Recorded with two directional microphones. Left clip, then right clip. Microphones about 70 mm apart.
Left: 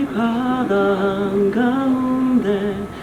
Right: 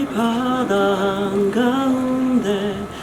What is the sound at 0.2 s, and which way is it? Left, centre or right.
Mantra, centre.